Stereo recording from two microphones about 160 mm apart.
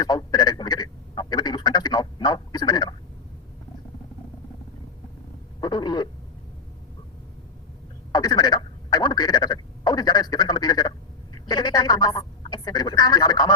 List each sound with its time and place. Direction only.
0.0 s speech: 25° left (ahead or behind)
5.5 s a sound: 25° left (ahead or behind)
8.1 s telephone: 25° left (ahead or behind)
11.4 s speech: 25° left (ahead or behind)